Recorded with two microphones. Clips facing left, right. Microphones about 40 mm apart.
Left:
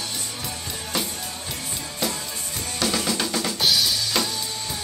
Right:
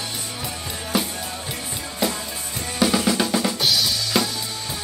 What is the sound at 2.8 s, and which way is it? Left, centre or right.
Drum kit, centre.